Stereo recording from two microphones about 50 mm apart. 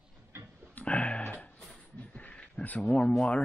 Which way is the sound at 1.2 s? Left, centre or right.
Left.